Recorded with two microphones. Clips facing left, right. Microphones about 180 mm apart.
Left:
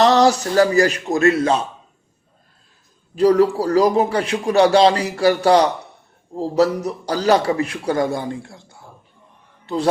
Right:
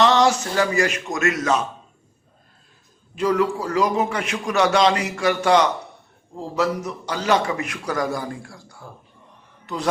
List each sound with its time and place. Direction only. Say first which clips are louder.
0.0 s a man's voice: left 3 dB; 35° left (ahead or behind)
3.2 s a man's voice: left 6 dB; 35° left (ahead or behind)